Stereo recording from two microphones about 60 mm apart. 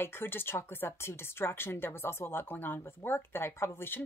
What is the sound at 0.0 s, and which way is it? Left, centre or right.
Speech, left.